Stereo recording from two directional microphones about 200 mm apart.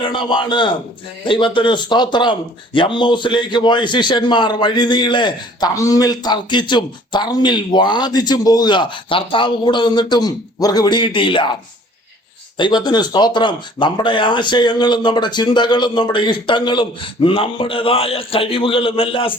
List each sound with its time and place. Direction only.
0.1 s a man's voice: 25° left (ahead or behind)
12.5 s a man's voice: 20° left (ahead or behind)